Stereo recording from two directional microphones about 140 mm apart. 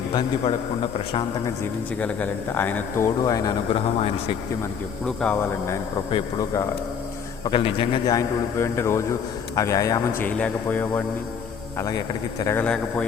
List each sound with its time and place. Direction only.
0.1 s a man's voice: 30° left (ahead or behind)
2.0 s speech: 15° left (ahead or behind)
3.7 s a man's voice: 40° left (ahead or behind)
5.0 s speech: 10° left (ahead or behind)
6.4 s a man's voice: 25° left (ahead or behind)
7.4 s a man's voice: 40° left (ahead or behind)
8.5 s a man's voice: 20° left (ahead or behind)
10.2 s speech: 10° left (ahead or behind)
11.8 s a man's voice: 25° left (ahead or behind)
12.5 s speech: 10° left (ahead or behind)